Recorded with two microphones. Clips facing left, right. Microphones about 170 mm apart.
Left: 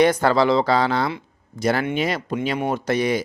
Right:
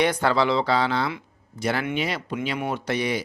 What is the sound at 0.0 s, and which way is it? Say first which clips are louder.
A man's voice: left 5 dB; 45° left (ahead or behind).